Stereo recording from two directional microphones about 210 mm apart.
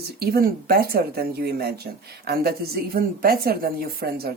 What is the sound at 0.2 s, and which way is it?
Speech, 45° right (ahead or behind).